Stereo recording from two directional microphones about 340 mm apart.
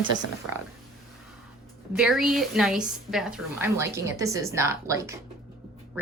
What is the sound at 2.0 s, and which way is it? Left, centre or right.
A woman's voice, centre.